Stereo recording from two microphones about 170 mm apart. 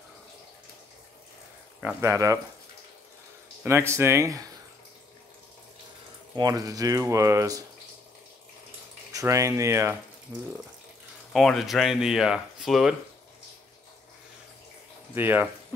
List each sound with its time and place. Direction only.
1.8 s speech: 10° right (ahead or behind)
3.6 s speech: 15° right (ahead or behind)
6.3 s speech: 20° right (ahead or behind)
9.1 s speech: 20° right (ahead or behind)
11.3 s speech: centre (ahead or behind)
15.1 s speech: 10° right (ahead or behind)